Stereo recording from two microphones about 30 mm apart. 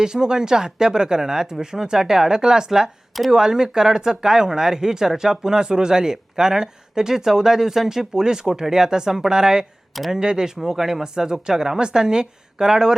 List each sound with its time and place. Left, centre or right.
0.0 s speech: right